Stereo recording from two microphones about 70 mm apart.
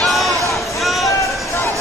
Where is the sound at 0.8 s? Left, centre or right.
Centre.